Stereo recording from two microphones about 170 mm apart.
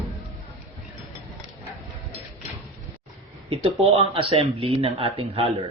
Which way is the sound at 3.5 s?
35° right (ahead or behind).